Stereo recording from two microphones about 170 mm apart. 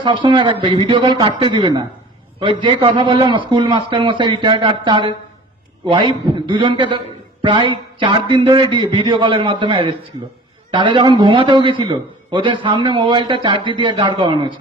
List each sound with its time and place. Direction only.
0.0 s a man's voice: 30° right (ahead or behind)